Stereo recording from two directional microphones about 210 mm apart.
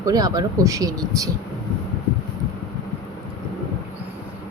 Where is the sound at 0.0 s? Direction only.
15° right (ahead or behind).